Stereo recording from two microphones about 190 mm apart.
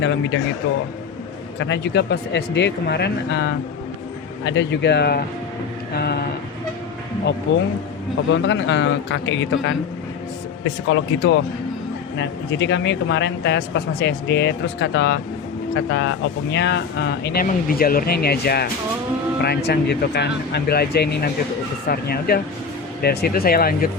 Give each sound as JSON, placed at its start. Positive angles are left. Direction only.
{"t": 0.0, "sound": "speech", "side_deg": 70}
{"t": 1.5, "sound": "speech", "side_deg": 70}
{"t": 7.5, "sound": "speech", "side_deg": 70}
{"t": 10.8, "sound": "speech", "side_deg": 75}
{"t": 17.4, "sound": "speech", "side_deg": 50}